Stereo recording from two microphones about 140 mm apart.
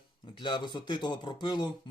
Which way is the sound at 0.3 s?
30° left (ahead or behind).